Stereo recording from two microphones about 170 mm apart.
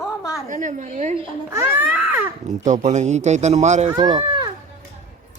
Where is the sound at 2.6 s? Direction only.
45° right (ahead or behind).